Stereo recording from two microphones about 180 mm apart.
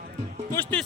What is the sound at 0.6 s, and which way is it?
Speech, 10° left (ahead or behind).